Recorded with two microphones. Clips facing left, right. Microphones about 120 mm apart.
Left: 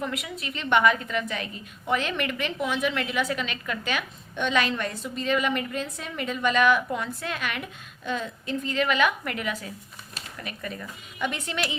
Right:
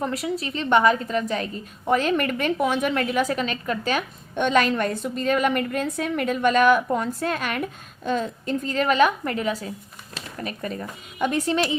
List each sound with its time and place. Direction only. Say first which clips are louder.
0.0 s a woman's voice: right 6 dB; 35° right (ahead or behind)